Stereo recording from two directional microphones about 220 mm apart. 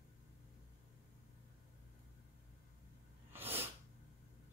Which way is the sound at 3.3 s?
10° right (ahead or behind).